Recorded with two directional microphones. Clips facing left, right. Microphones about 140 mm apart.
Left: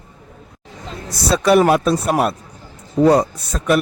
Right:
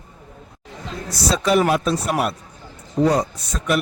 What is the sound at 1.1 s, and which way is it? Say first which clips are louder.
Speech: left 4 dB; 55° left (ahead or behind).